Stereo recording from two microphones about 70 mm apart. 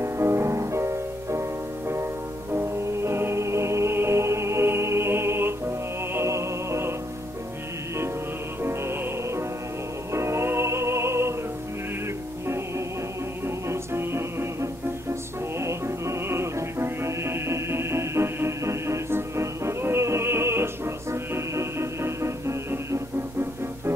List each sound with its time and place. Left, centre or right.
0.0 s music: right
2.5 s music: right
8.6 s music: right
13.7 s music: right